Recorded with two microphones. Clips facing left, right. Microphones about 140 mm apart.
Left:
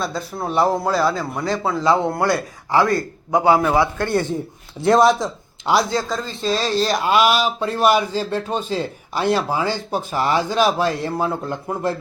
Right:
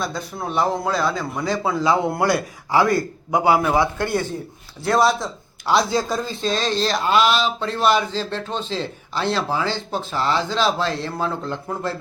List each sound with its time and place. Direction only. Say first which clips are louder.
0.0 s a man's voice: left 2 dB; 5° left (ahead or behind)
3.8 s a man's voice: left 1 dB; 15° right (ahead or behind)
4.9 s speech: left 1 dB; 15° left (ahead or behind)
5.9 s a man's voice: right 1 dB; 15° right (ahead or behind)
6.4 s speech: left 3 dB; 5° left (ahead or behind)